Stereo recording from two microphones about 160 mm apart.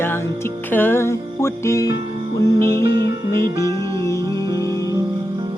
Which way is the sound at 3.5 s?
30° right (ahead or behind).